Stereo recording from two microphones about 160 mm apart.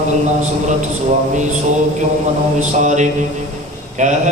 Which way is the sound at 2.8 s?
50° right (ahead or behind).